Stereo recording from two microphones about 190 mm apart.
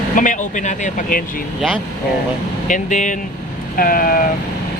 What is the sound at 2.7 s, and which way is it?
Speech, 40° left (ahead or behind).